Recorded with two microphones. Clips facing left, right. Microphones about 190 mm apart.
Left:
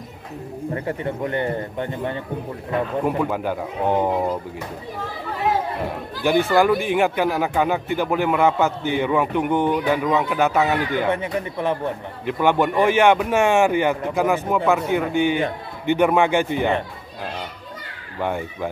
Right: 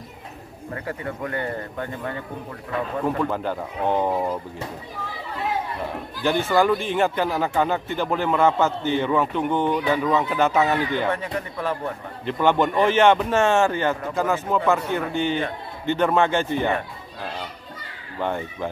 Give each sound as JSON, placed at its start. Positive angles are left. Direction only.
{"t": 0.7, "sound": "a man's voice", "side_deg": 25}
{"t": 3.0, "sound": "speech", "side_deg": 15}
{"t": 6.2, "sound": "speech", "side_deg": 10}
{"t": 11.0, "sound": "a man's voice", "side_deg": 20}
{"t": 18.2, "sound": "speech", "side_deg": 10}